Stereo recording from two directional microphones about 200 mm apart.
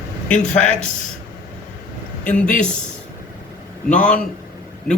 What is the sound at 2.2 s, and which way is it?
Speech, 5° left (ahead or behind).